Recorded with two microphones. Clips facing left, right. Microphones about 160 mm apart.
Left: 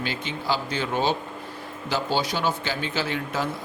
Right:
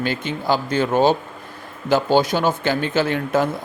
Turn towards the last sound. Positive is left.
turn(degrees=-55)  # may be behind; listen again after turning